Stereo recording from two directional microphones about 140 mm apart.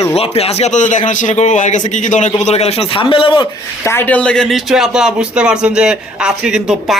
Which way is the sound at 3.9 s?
15° left (ahead or behind).